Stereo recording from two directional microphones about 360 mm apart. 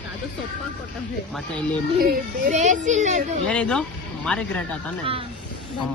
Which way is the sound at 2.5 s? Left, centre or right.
Centre.